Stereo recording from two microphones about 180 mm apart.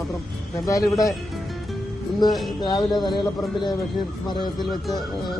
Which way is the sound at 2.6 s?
25° left (ahead or behind).